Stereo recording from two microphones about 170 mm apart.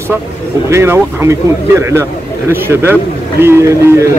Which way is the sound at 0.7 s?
15° right (ahead or behind).